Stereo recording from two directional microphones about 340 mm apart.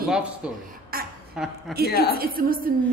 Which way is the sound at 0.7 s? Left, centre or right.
Right.